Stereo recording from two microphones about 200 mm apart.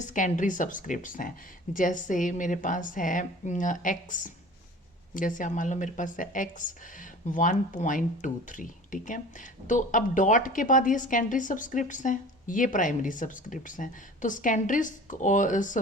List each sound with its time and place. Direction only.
0.0 s a woman's voice: 40° left (ahead or behind)